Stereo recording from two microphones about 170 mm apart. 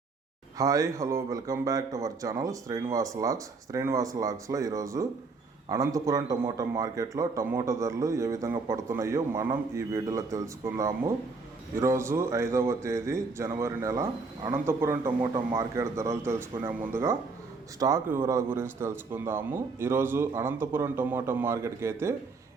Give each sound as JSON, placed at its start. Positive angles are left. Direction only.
{"t": 0.6, "sound": "a man's voice", "side_deg": -20}